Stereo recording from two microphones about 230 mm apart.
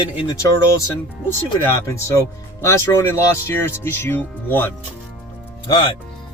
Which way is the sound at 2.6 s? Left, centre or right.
Centre.